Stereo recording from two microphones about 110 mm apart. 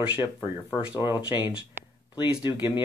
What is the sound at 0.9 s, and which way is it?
Speech, 20° right (ahead or behind).